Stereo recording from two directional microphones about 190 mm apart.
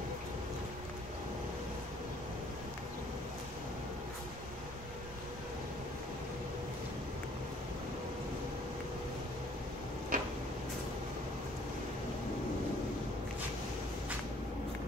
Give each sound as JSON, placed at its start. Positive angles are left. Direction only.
{"t": 10.1, "sound": "tick-tock", "side_deg": -45}